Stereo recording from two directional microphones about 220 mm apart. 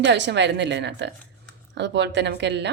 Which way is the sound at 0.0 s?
50° right (ahead or behind).